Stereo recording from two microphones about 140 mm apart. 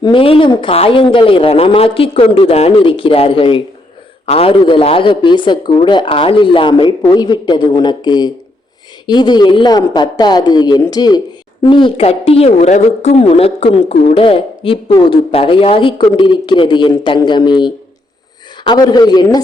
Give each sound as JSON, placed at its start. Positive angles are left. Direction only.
{"t": 0.0, "sound": "a woman's voice", "side_deg": 40}